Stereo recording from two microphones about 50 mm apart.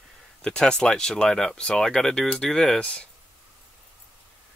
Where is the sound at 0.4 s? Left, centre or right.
Centre.